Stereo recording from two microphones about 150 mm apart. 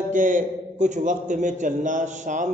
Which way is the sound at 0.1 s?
60° right (ahead or behind).